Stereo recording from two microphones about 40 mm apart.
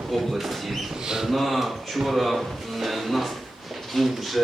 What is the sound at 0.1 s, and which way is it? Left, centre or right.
Speech, centre.